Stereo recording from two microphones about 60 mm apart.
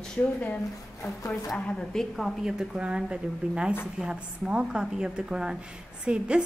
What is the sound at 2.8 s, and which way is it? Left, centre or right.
A woman's voice, centre.